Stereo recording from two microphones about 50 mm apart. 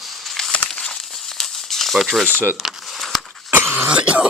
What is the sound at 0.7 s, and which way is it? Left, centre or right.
Crumpling, centre.